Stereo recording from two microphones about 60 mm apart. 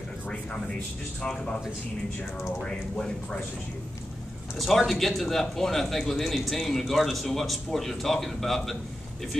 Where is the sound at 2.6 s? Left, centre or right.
Centre.